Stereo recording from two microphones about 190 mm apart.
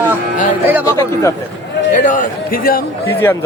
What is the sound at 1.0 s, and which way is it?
Speech, 15° left (ahead or behind).